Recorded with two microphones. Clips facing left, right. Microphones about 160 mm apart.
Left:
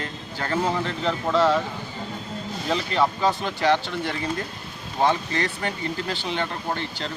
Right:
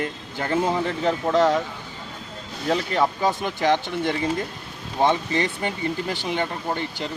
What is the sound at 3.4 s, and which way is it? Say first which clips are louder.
Speech: even; 15° right (ahead or behind).